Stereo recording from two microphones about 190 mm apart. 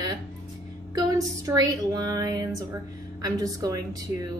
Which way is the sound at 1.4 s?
20° right (ahead or behind).